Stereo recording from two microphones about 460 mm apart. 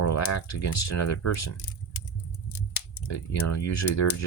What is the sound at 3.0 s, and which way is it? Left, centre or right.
Speech, left.